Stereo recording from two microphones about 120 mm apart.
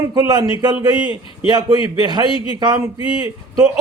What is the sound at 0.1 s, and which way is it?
Speech, 35° right (ahead or behind).